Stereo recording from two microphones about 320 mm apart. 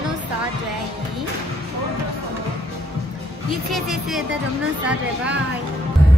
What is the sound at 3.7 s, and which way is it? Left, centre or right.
Speech, centre.